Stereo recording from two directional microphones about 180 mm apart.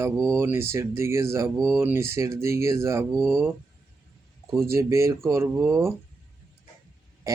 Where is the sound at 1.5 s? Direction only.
Centre (ahead or behind).